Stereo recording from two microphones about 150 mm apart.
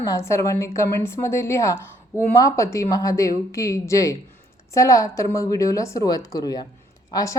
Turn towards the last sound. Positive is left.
turn(degrees=20)  # may be behind; listen again after turning